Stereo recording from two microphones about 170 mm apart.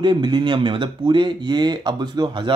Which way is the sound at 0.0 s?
25° right (ahead or behind).